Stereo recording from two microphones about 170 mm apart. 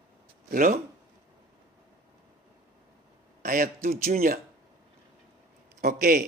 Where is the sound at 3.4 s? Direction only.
60° right (ahead or behind).